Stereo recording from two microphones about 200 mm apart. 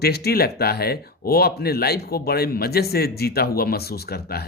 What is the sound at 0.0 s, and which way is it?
Speech, 50° left (ahead or behind).